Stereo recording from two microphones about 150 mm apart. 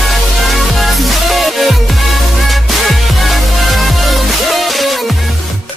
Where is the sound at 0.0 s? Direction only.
Centre (ahead or behind).